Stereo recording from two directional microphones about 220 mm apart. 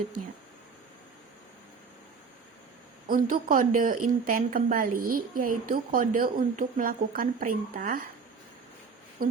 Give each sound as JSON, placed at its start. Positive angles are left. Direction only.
{"t": 3.1, "sound": "a woman's voice", "side_deg": -40}
{"t": 9.2, "sound": "speech", "side_deg": -40}